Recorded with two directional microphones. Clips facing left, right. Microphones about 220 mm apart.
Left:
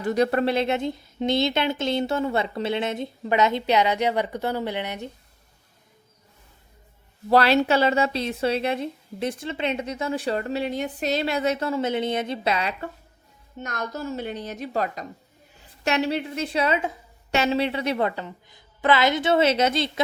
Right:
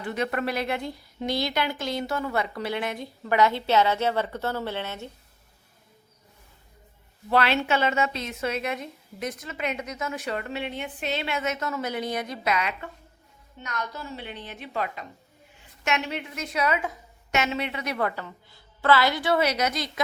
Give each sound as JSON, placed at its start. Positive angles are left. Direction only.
{"t": 0.0, "sound": "a woman's voice", "side_deg": 40}
{"t": 7.3, "sound": "a woman's voice", "side_deg": 35}
{"t": 13.6, "sound": "a woman's voice", "side_deg": 45}